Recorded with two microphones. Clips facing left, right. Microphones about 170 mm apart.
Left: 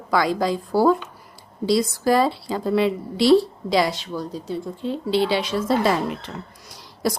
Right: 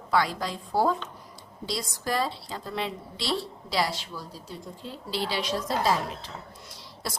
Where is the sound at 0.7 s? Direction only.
75° left (ahead or behind).